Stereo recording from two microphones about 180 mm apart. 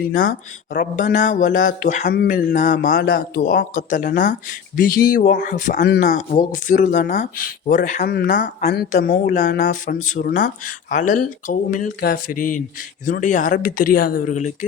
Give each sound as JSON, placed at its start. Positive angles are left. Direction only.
{"t": 0.0, "sound": "speech", "side_deg": 50}
{"t": 5.8, "sound": "speech", "side_deg": 65}
{"t": 6.1, "sound": "speech", "side_deg": 45}